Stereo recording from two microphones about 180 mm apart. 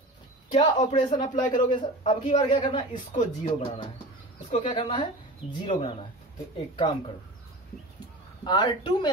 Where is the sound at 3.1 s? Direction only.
40° left (ahead or behind).